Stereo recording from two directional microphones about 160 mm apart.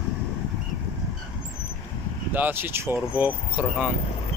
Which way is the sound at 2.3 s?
10° right (ahead or behind).